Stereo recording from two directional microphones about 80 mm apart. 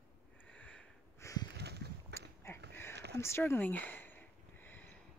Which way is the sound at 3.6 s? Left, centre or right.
Centre.